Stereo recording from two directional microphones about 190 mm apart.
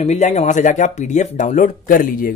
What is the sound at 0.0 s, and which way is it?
Speech, 35° left (ahead or behind).